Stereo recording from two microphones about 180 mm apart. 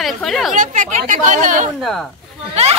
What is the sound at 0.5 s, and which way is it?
Speech, 45° right (ahead or behind).